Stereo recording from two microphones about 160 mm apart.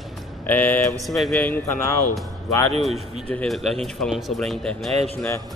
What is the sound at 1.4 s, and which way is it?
Speech, 15° left (ahead or behind).